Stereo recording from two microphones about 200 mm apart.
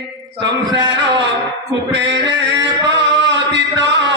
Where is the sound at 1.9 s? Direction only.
60° right (ahead or behind).